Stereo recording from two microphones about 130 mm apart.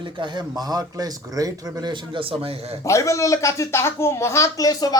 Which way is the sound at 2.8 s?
25° left (ahead or behind).